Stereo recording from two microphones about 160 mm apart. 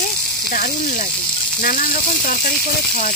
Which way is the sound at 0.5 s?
65° left (ahead or behind).